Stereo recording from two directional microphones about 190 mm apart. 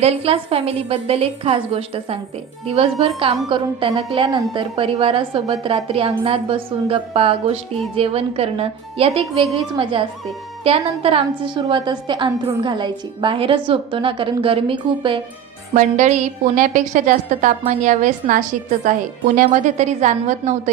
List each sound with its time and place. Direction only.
0.0 s a woman's voice: 30° right (ahead or behind)
15.7 s a woman's voice: 40° right (ahead or behind)